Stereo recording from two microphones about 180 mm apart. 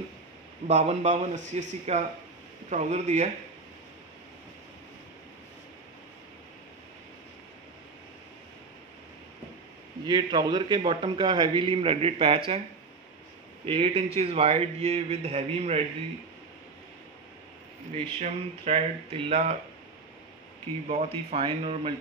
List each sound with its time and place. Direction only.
0.7 s a man's voice: 40° right (ahead or behind)
10.0 s a man's voice: 25° right (ahead or behind)
13.7 s a man's voice: 30° right (ahead or behind)
17.9 s a man's voice: 30° right (ahead or behind)
20.9 s a man's voice: 35° right (ahead or behind)